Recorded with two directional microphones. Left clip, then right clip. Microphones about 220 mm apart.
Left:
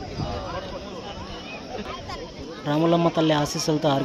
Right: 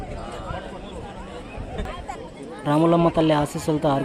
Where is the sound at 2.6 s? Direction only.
10° right (ahead or behind).